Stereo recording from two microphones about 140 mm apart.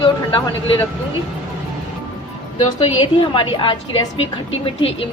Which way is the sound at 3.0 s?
35° left (ahead or behind).